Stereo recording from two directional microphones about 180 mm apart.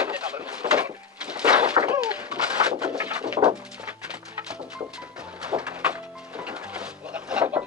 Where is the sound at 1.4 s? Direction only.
5° right (ahead or behind).